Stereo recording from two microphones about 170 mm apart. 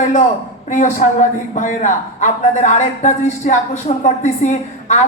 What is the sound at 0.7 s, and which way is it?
A woman's voice, 50° left (ahead or behind).